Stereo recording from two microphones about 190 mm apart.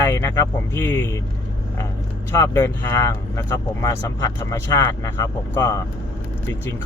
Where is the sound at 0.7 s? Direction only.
10° left (ahead or behind).